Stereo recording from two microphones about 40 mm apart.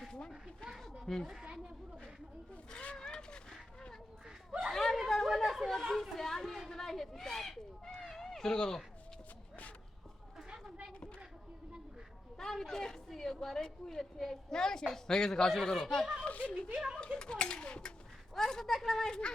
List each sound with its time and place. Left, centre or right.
1.0 s a woman's voice: centre
2.9 s cat: centre
4.7 s a sound: centre
5.0 s chatter: centre
7.3 s a sound: centre
7.9 s cat: centre
12.4 s a sound: centre
14.0 s a woman's voice: centre
16.2 s a woman's voice: left
16.7 s speech: centre
17.2 s speech: left
18.3 s a woman's voice: centre